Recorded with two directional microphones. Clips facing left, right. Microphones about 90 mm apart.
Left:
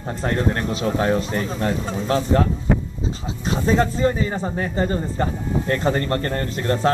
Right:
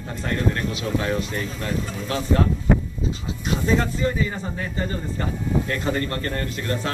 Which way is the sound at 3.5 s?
30° left (ahead or behind).